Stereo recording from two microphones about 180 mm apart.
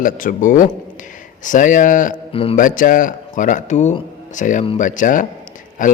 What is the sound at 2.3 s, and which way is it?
Speech, 30° left (ahead or behind).